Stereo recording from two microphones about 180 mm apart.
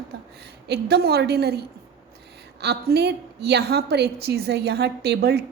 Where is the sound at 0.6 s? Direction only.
65° right (ahead or behind).